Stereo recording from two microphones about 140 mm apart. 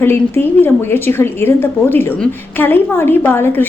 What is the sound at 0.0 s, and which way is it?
A woman's voice, 15° left (ahead or behind).